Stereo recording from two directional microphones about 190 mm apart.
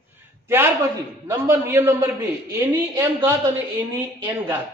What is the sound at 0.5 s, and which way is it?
A woman's voice, 15° right (ahead or behind).